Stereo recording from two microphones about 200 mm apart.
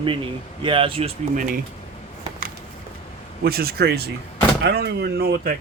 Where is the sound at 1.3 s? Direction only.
45° right (ahead or behind).